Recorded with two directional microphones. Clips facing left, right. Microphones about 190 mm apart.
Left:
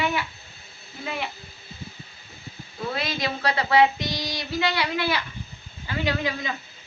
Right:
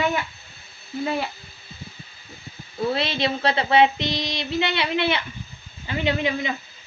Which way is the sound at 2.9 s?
30° right (ahead or behind).